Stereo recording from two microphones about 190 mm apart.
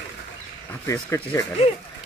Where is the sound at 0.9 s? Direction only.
15° left (ahead or behind).